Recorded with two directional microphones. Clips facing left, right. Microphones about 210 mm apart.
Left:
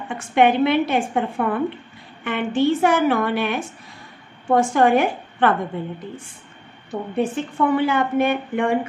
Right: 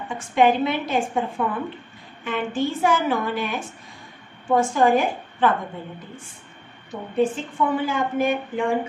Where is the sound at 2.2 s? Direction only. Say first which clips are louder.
Left 5 dB; 65° left (ahead or behind).